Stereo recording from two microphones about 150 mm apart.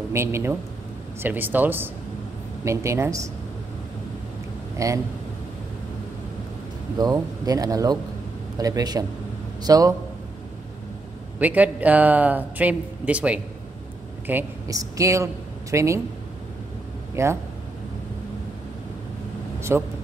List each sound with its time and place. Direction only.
0.1 s speech: 20° right (ahead or behind)
4.7 s speech: 20° right (ahead or behind)
7.0 s speech: 25° right (ahead or behind)
11.3 s speech: 10° right (ahead or behind)
17.1 s speech: 20° right (ahead or behind)
19.7 s speech: 15° right (ahead or behind)